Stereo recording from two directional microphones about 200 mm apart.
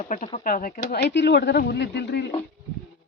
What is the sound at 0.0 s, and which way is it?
Speech, 40° left (ahead or behind).